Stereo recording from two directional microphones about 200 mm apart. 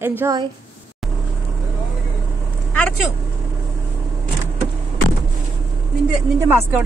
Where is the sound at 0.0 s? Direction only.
10° right (ahead or behind).